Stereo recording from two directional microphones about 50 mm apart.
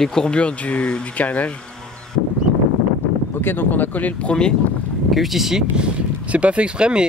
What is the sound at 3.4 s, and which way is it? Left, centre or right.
Speech, left.